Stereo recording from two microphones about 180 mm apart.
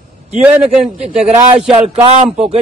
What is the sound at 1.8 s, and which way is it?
Speech, 35° right (ahead or behind).